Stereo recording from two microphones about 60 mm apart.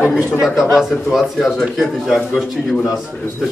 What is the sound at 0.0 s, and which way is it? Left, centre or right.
Speech, centre.